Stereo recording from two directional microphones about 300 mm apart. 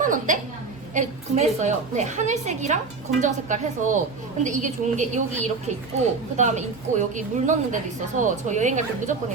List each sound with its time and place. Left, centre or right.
0.0 s a woman's voice: right